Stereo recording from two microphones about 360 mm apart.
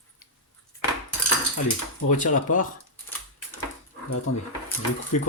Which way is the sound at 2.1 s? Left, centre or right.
Left.